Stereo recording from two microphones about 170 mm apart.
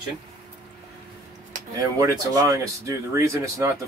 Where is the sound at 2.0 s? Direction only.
20° right (ahead or behind).